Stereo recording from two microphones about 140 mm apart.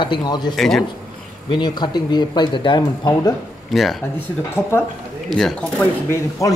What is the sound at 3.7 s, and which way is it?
Speech, centre (ahead or behind).